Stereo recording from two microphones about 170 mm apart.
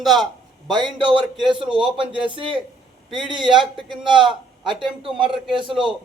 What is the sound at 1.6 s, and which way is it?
Speech, 5° right (ahead or behind).